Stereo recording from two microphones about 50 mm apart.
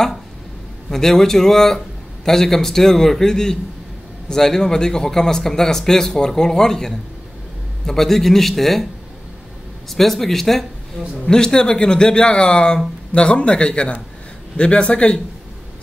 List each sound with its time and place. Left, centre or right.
0.8 s a man's voice: centre
9.8 s a man's voice: centre
11.2 s speech: centre